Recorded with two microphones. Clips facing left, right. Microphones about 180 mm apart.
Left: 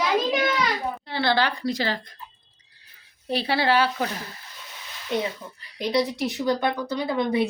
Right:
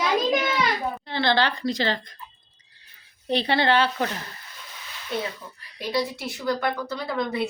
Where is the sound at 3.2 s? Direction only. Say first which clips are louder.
Right 1 dB; 5° left (ahead or behind).